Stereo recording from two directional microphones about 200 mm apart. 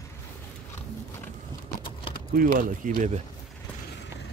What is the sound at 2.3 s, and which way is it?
Speech, 40° right (ahead or behind).